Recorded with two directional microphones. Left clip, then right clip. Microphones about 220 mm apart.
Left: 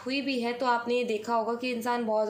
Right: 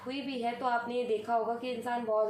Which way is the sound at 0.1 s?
50° left (ahead or behind).